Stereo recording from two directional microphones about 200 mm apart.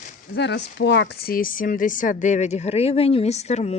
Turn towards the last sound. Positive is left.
turn(degrees=35)  # may be behind; listen again after turning